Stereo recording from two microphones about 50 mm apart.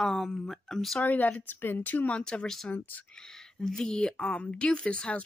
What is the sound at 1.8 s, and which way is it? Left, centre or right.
Speech, left.